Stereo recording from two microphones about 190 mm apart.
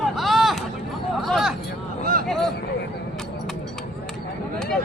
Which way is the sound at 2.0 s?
50° right (ahead or behind).